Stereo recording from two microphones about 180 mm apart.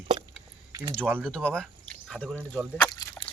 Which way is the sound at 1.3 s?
5° left (ahead or behind).